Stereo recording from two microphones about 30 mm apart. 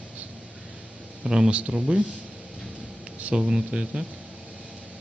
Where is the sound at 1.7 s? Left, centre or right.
Right.